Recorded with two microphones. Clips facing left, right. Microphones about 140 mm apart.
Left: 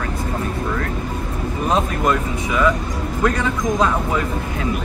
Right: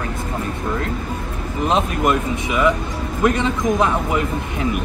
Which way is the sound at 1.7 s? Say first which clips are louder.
Right 1 dB; 20° right (ahead or behind).